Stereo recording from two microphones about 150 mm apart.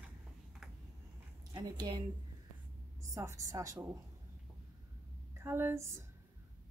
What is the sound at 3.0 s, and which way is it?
Speech, 20° right (ahead or behind).